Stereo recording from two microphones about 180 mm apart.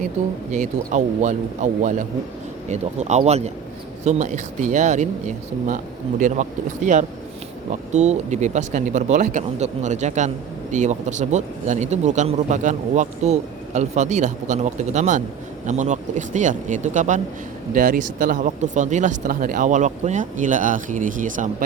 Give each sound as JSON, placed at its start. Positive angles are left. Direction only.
{"t": 0.5, "sound": "speech", "side_deg": -40}